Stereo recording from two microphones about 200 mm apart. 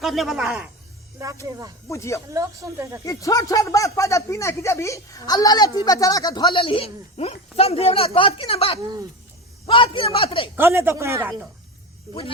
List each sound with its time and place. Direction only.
0.0 s a man's voice: centre (ahead or behind)
1.9 s speech: 15° left (ahead or behind)
2.3 s speech: 15° right (ahead or behind)
3.0 s speech: 15° left (ahead or behind)
10.6 s speech: 10° right (ahead or behind)